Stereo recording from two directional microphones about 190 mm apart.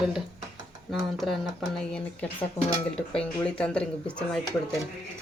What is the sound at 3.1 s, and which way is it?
Speech, 5° left (ahead or behind).